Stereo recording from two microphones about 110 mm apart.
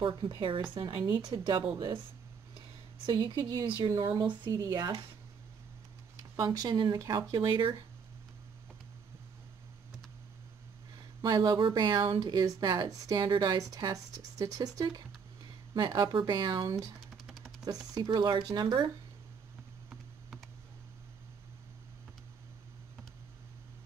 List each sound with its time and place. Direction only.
0.0 s a woman's voice: 40° right (ahead or behind)
3.1 s speech: 40° right (ahead or behind)
3.9 s speech: 25° right (ahead or behind)
4.2 s speech: 40° right (ahead or behind)
6.4 s speech: 35° right (ahead or behind)
11.0 s speech: 40° right (ahead or behind)
16.6 s speech: 30° right (ahead or behind)
17.3 s a sound: centre (ahead or behind)
17.9 s speech: 40° right (ahead or behind)
19.9 s computer keyboard: centre (ahead or behind)